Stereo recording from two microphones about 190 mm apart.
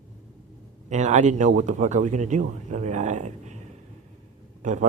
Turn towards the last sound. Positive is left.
turn(degrees=-40)  # may be behind; listen again after turning